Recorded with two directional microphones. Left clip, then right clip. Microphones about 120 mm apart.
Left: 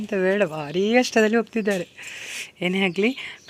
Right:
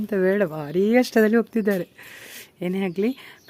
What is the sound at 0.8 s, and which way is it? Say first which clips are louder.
Speech: even; 60° right (ahead or behind).